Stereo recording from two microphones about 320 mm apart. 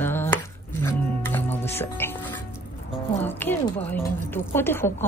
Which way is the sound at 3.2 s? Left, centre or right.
Centre.